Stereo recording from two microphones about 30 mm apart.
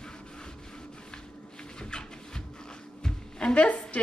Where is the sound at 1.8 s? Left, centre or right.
Left.